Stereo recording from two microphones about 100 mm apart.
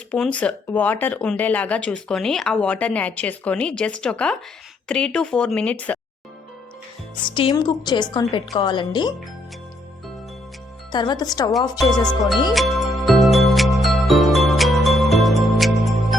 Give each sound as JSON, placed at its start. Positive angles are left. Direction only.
{"t": 0.2, "sound": "speech", "side_deg": 10}
{"t": 7.2, "sound": "speech", "side_deg": 55}
{"t": 10.9, "sound": "speech", "side_deg": 45}
{"t": 12.5, "sound": "music", "side_deg": 0}